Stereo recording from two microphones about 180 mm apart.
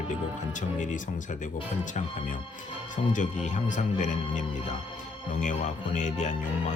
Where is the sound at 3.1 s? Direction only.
45° left (ahead or behind).